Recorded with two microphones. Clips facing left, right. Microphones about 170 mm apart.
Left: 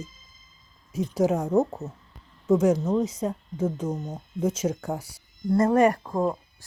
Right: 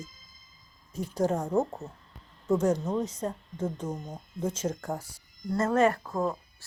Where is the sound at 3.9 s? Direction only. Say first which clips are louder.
Left 5 dB; 25° left (ahead or behind).